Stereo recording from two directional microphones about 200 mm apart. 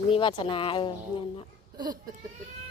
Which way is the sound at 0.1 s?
25° left (ahead or behind).